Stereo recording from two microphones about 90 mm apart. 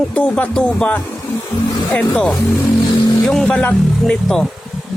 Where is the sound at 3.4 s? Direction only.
15° left (ahead or behind).